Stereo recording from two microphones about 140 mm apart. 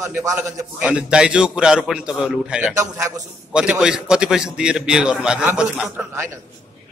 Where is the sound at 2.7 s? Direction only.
25° right (ahead or behind).